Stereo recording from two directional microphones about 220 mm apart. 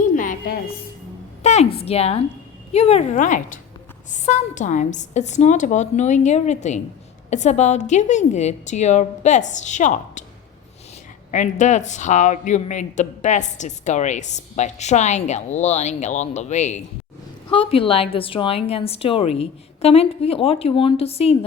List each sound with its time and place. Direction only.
0.1 s a sound: 35° left (ahead or behind)
1.4 s speech: 30° left (ahead or behind)
11.3 s a woman's voice: 35° left (ahead or behind)